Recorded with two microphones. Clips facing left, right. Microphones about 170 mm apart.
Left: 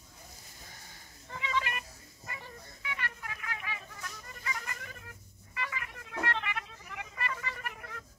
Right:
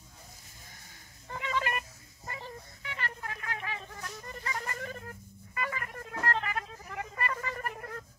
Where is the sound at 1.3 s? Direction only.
50° right (ahead or behind).